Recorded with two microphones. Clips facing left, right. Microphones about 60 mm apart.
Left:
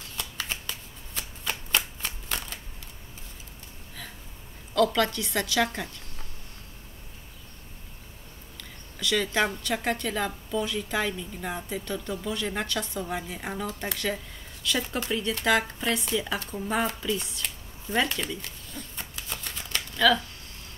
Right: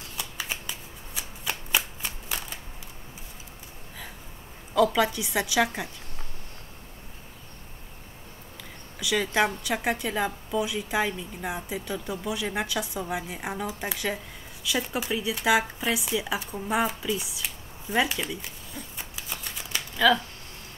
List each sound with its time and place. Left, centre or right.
0.2 s shuffling cards: centre
4.7 s a woman's voice: centre
8.9 s a woman's voice: centre